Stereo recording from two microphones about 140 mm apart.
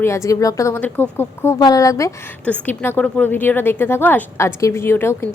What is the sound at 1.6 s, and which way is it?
A woman's voice, 25° left (ahead or behind).